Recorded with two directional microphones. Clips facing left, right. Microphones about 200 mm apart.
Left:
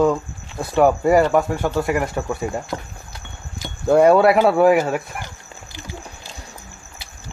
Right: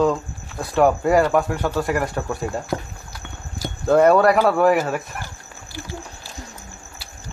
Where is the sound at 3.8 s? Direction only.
15° left (ahead or behind).